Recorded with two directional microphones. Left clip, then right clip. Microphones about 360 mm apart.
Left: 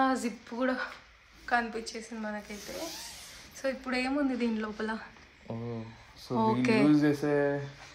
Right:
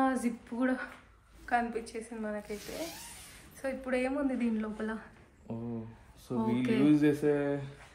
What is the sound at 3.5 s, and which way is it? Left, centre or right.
A woman's voice, centre.